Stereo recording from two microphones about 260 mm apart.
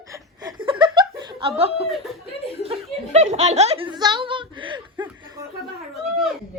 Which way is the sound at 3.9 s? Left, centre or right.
Centre.